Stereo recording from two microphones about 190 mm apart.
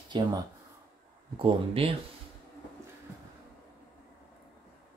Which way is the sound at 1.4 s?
30° right (ahead or behind).